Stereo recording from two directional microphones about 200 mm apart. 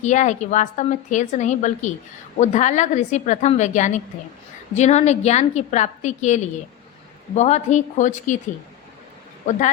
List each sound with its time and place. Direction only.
0.0 s a woman's voice: 35° left (ahead or behind)